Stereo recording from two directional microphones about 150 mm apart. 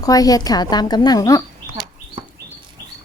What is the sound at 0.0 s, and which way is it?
A woman's voice, 25° left (ahead or behind).